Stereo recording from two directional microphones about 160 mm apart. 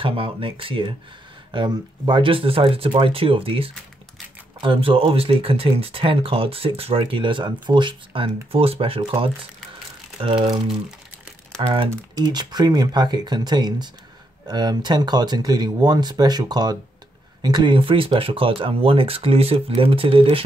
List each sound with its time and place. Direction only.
0.0 s speech: 35° right (ahead or behind)
11.7 s speech: 30° right (ahead or behind)